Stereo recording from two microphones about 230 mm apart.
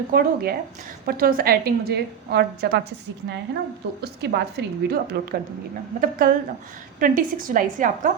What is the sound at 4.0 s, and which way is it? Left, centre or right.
A woman's voice, right.